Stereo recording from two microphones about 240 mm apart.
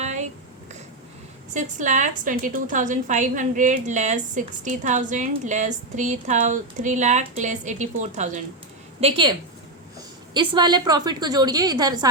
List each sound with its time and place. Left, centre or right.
0.0 s a sound: right
1.5 s a woman's voice: right
10.3 s a woman's voice: centre